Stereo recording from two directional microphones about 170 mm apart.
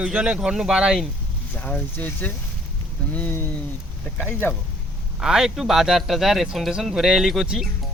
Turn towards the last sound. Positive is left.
turn(degrees=0)  # may be behind; listen again after turning